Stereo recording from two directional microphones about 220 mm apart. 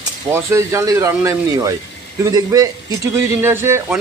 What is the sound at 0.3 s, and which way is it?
Speech, 10° right (ahead or behind).